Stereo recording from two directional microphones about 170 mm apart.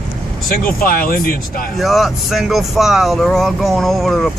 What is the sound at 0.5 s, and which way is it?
Speech, 55° left (ahead or behind).